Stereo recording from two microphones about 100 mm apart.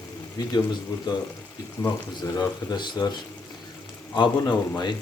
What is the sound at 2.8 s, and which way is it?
Speech, 45° left (ahead or behind).